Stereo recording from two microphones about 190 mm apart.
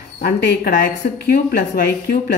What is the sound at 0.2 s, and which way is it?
A woman's voice, 55° left (ahead or behind).